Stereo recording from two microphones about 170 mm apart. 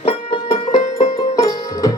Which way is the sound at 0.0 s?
40° left (ahead or behind).